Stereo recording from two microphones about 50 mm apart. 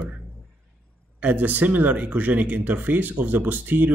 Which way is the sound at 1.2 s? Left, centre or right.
Right.